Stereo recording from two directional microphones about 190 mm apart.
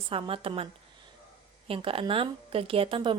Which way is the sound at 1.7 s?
30° right (ahead or behind).